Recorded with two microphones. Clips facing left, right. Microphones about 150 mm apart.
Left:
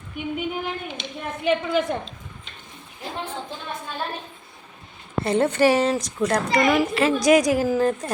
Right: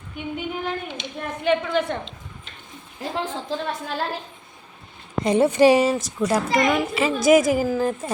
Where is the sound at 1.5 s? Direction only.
5° left (ahead or behind).